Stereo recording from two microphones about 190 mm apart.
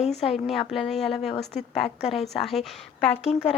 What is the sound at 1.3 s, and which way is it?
Speech, 35° left (ahead or behind).